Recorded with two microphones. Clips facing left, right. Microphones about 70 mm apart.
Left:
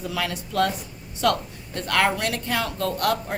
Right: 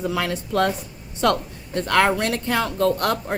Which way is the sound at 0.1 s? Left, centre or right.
Right.